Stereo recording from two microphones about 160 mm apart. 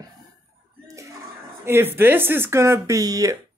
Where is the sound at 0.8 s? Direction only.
20° right (ahead or behind).